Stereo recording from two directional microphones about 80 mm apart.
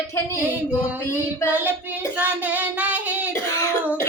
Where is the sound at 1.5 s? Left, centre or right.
Right.